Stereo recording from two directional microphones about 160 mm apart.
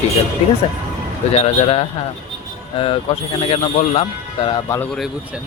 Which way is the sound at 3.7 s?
40° left (ahead or behind).